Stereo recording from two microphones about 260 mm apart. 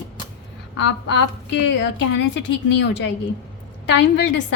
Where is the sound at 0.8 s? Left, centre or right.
Left.